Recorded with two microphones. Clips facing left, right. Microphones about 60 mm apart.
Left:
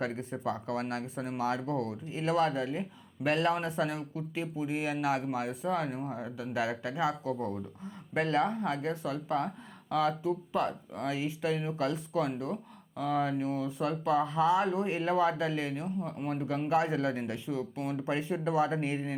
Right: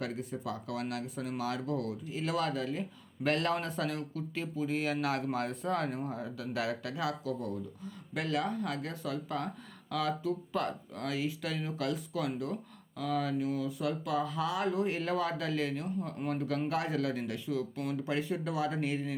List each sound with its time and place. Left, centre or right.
0.0 s speech: left